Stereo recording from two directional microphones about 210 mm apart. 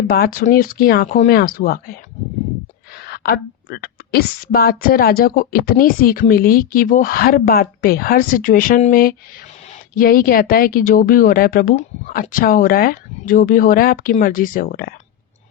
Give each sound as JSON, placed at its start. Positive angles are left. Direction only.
{"t": 0.1, "sound": "speech", "side_deg": 45}
{"t": 1.0, "sound": "speech", "side_deg": 35}
{"t": 1.3, "sound": "speech", "side_deg": 45}
{"t": 3.0, "sound": "speech", "side_deg": 45}